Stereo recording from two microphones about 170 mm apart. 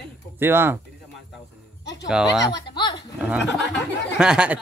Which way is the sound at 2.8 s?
25° left (ahead or behind).